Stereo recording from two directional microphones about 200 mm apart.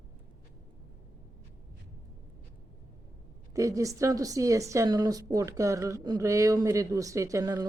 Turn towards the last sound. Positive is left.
turn(degrees=-15)  # may be behind; listen again after turning